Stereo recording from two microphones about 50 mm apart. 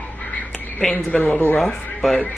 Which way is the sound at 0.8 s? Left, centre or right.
Centre.